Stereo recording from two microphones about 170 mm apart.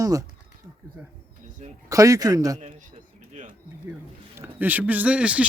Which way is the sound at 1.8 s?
20° right (ahead or behind).